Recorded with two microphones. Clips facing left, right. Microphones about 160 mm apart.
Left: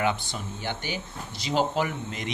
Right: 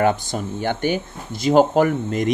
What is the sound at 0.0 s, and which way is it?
Speech, 45° right (ahead or behind).